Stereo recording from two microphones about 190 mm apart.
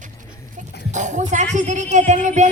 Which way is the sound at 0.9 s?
40° right (ahead or behind).